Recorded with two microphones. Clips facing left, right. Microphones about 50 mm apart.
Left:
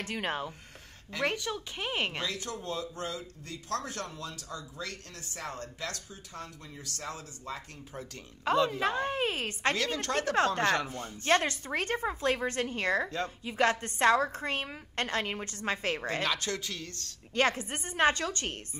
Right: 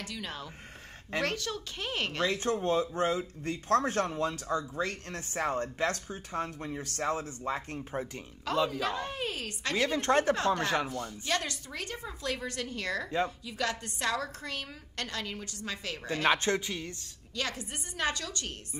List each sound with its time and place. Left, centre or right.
0.0 s a woman's voice: left
1.2 s speech: centre
2.2 s speech: right
8.7 s a woman's voice: left
9.8 s a woman's voice: right
10.3 s a woman's voice: left
16.2 s a woman's voice: right
17.4 s a woman's voice: left